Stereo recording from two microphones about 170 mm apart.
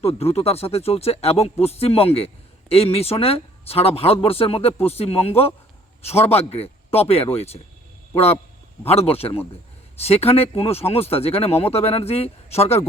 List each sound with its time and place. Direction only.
0.0 s a man's voice: 35° left (ahead or behind)